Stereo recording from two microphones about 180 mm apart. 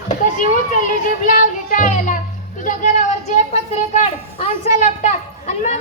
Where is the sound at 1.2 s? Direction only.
45° left (ahead or behind).